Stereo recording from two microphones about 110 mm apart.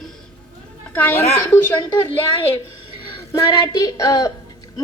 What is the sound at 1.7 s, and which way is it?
Speech, 45° left (ahead or behind).